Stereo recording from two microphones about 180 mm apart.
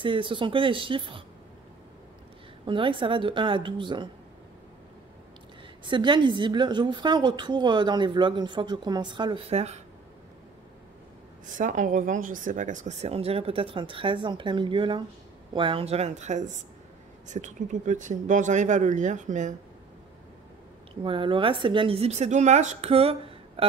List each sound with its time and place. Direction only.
0.0 s a woman's voice: 30° right (ahead or behind)
2.6 s a woman's voice: 30° right (ahead or behind)
5.9 s a woman's voice: 25° right (ahead or behind)
11.4 s speech: 45° right (ahead or behind)
21.0 s speech: 30° right (ahead or behind)